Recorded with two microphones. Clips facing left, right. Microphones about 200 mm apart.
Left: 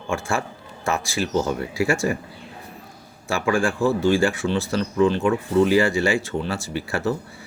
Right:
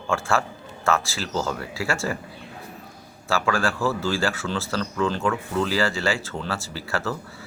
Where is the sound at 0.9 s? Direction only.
15° left (ahead or behind).